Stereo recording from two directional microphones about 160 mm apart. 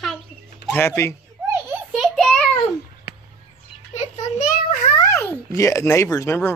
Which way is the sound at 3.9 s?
50° left (ahead or behind).